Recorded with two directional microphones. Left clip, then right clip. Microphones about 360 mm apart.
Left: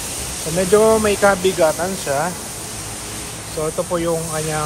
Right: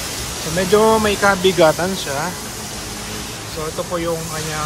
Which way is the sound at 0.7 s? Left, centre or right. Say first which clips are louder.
Even; centre.